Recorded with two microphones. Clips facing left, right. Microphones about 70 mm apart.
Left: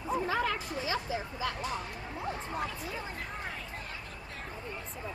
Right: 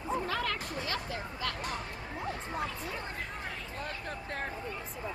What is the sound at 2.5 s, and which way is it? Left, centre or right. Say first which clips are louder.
Speech: even; centre.